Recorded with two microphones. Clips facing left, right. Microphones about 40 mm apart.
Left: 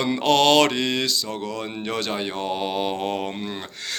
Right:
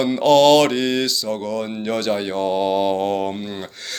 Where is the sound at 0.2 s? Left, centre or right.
Left.